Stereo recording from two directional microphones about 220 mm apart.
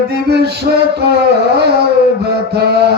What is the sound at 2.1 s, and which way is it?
Mantra, 50° right (ahead or behind).